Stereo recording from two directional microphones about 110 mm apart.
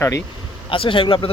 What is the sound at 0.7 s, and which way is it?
Speech, 55° left (ahead or behind).